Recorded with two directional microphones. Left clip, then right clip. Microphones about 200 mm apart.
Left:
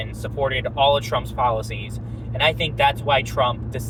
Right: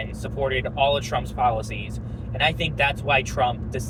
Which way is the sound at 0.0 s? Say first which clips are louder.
Left 3 dB; 25° left (ahead or behind).